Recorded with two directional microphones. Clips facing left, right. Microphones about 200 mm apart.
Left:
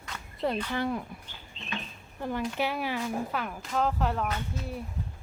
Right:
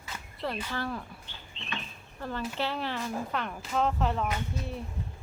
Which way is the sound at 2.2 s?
15° left (ahead or behind).